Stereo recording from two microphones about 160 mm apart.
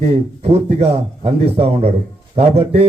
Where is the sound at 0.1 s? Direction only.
40° right (ahead or behind).